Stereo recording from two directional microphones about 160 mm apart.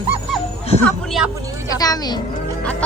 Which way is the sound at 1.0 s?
Centre (ahead or behind).